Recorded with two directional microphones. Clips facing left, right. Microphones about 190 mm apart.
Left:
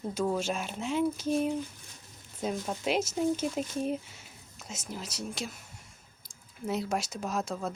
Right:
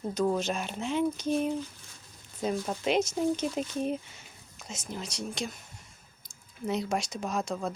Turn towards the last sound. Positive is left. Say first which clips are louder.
# right 1 dB
turn(degrees=5)  # may be behind; listen again after turning